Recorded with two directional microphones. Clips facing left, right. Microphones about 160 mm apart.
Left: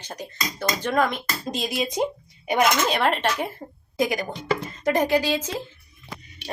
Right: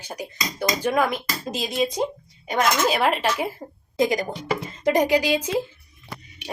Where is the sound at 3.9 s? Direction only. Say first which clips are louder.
Right 3 dB; 20° right (ahead or behind).